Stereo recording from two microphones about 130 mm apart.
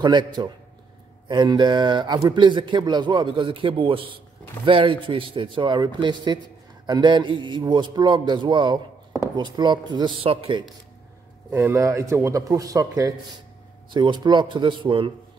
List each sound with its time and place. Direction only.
0.0 s a man's voice: 35° right (ahead or behind)
11.5 s a man's voice: 20° right (ahead or behind); by 15.1 s 40° right (ahead or behind)